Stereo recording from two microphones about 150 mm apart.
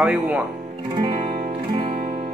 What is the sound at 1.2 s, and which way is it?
Music, 55° right (ahead or behind).